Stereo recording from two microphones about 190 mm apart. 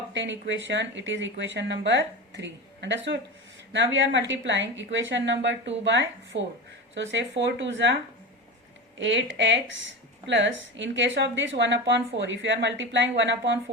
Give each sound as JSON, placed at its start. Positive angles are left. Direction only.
{"t": 0.1, "sound": "speech", "side_deg": -70}
{"t": 9.0, "sound": "speech", "side_deg": -70}